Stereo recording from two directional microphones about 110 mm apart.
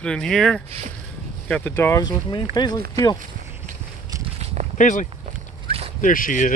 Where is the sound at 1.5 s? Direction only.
15° left (ahead or behind).